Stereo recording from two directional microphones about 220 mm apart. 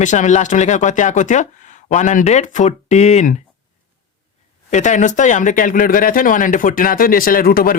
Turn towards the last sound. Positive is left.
turn(degrees=40)  # may be behind; listen again after turning